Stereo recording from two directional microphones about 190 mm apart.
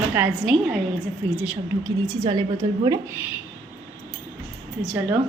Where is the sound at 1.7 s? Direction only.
20° right (ahead or behind).